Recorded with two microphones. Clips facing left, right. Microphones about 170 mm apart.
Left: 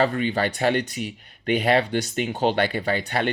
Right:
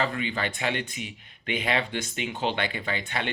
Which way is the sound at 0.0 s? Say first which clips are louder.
Left 7 dB; 40° left (ahead or behind).